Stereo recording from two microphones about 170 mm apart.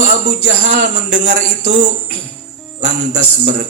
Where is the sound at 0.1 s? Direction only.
50° right (ahead or behind).